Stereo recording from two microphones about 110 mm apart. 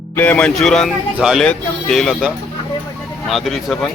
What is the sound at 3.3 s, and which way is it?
Speech, centre (ahead or behind).